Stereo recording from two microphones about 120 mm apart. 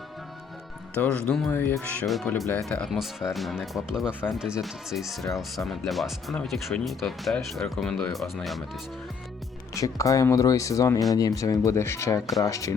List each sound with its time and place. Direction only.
0.9 s speech: 10° left (ahead or behind)
2.0 s speech: centre (ahead or behind)
9.7 s speech: 25° left (ahead or behind)